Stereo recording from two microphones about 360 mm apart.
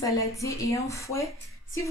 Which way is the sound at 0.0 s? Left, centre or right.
Centre.